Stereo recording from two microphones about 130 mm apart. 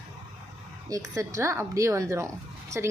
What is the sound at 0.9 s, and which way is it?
Speech, 25° right (ahead or behind).